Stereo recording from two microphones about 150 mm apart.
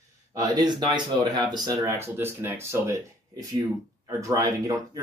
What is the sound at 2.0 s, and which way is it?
Speech, 15° right (ahead or behind).